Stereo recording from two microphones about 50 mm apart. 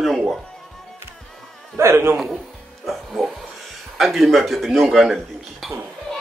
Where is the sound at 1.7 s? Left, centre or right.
Right.